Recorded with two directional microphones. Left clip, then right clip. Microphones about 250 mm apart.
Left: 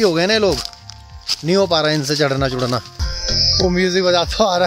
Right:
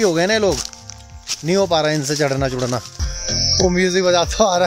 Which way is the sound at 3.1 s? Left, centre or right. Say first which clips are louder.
Left 2 dB; centre.